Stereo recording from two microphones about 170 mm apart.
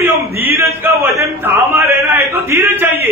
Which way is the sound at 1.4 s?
15° right (ahead or behind).